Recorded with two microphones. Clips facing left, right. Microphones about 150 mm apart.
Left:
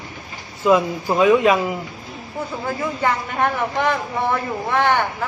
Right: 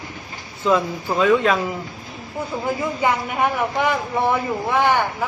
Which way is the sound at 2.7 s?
10° right (ahead or behind).